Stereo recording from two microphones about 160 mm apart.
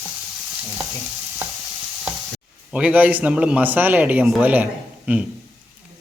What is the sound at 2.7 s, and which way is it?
Speech, 10° right (ahead or behind).